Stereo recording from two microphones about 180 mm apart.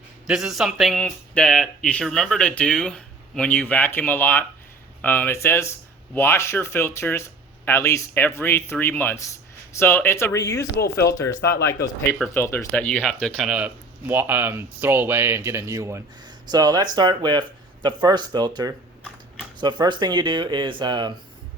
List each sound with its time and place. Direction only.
0.3 s speech: 5° right (ahead or behind); by 10.7 s 15° left (ahead or behind)
11.3 s speech: 75° left (ahead or behind)
12.2 s speech: 15° left (ahead or behind); by 21.1 s 25° right (ahead or behind)